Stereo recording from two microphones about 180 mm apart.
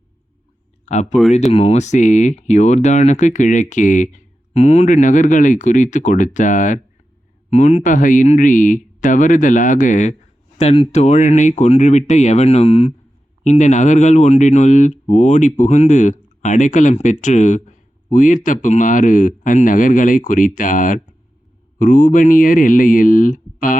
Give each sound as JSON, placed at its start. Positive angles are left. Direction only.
{"t": 0.9, "sound": "speech", "side_deg": 40}